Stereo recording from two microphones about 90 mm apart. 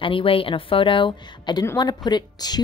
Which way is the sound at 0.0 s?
85° left.